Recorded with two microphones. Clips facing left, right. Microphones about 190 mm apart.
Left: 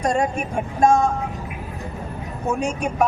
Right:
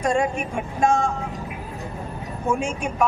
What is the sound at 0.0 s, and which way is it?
Speech, 40° left (ahead or behind).